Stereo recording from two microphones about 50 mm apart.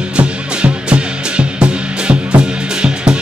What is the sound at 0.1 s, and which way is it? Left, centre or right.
Music, right.